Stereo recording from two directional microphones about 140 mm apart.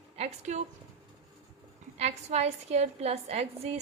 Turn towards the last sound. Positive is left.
turn(degrees=-50)  # may be behind; listen again after turning